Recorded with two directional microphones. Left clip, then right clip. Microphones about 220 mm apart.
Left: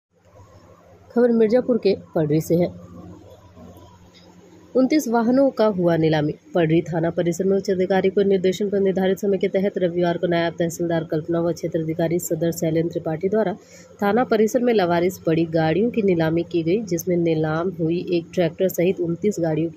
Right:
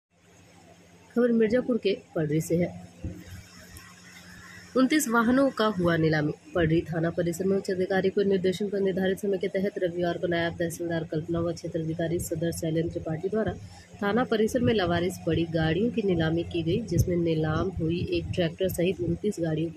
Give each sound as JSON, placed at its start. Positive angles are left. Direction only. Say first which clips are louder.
{"t": 1.1, "sound": "speech", "louder": "left 7 dB", "side_deg": 10}
{"t": 4.7, "sound": "speech", "louder": "left 5 dB", "side_deg": 10}